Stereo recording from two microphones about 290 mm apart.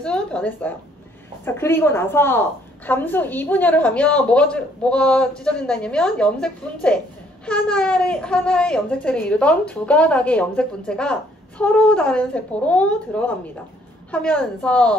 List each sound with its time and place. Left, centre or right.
0.0 s a woman's voice: centre